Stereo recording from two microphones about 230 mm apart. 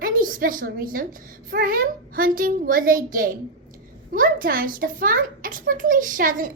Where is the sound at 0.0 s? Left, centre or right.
Right.